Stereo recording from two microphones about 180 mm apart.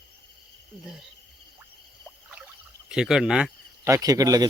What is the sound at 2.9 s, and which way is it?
Speech, 5° right (ahead or behind).